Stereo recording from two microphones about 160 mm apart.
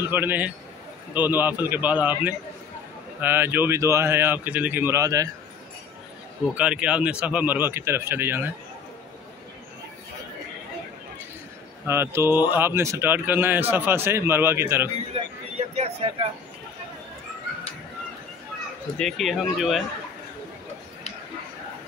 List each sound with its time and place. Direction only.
0.1 s speech: 10° right (ahead or behind)
6.5 s speech: 5° right (ahead or behind)
11.8 s speech: 15° right (ahead or behind)
15.5 s a sound: 40° right (ahead or behind)
18.9 s speech: 5° left (ahead or behind)